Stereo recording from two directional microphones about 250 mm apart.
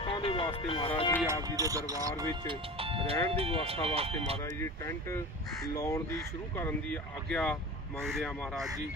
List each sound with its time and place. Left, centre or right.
0.0 s music: left
1.3 s speech: centre
4.6 s speech: centre